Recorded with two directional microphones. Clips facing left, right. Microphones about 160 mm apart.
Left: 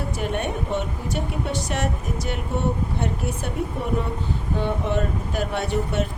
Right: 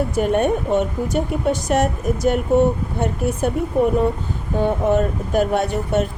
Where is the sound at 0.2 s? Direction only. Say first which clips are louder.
Right 10 dB; 45° right (ahead or behind).